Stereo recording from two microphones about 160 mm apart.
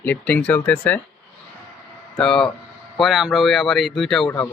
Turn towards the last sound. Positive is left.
turn(degrees=5)  # may be behind; listen again after turning